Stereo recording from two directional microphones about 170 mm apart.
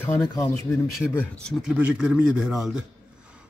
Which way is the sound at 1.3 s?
5° left (ahead or behind).